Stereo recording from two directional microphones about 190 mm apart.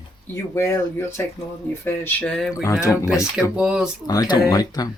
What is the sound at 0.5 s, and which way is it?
Speech, 15° left (ahead or behind).